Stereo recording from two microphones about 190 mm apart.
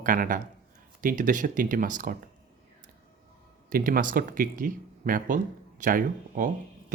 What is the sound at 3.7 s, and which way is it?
Speech, 50° right (ahead or behind).